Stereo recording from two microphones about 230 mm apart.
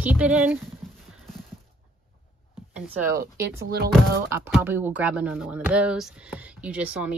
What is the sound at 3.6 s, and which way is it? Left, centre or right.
Speech, right.